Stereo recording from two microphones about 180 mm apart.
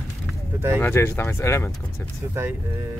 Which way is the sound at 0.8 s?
15° left (ahead or behind).